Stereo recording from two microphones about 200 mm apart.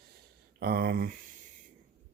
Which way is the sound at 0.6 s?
50° right (ahead or behind).